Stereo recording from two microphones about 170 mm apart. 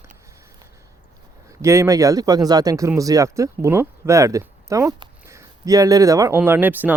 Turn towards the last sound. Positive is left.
turn(degrees=-10)  # may be behind; listen again after turning